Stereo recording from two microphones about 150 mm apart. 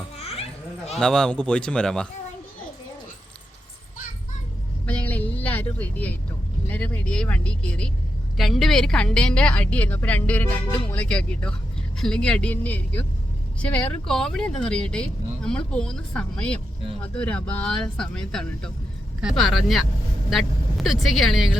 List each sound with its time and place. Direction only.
0.2 s children playing: 40° left (ahead or behind)
0.9 s a woman's voice: 5° left (ahead or behind)
4.9 s vehicle: 10° left (ahead or behind)
6.7 s a woman's voice: 10° left (ahead or behind)